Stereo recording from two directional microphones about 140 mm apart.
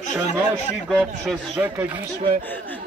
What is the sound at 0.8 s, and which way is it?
Speech, 5° left (ahead or behind).